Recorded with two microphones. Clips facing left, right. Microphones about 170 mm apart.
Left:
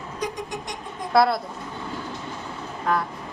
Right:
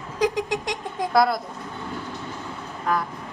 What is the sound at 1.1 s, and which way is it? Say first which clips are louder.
Speech: left 1 dB; 5° left (ahead or behind).